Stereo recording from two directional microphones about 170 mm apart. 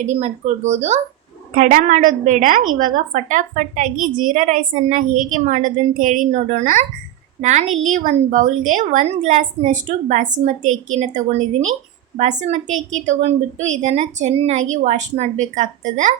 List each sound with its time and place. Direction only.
0.0 s speech: 40° right (ahead or behind)
1.5 s a woman's voice: 50° right (ahead or behind)